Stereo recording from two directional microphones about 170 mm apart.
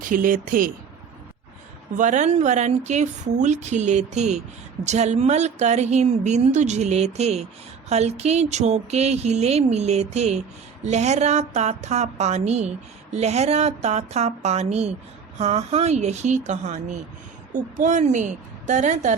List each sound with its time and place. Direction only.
0.0 s a woman's voice: 55° right (ahead or behind)
2.0 s a woman's voice: 45° right (ahead or behind)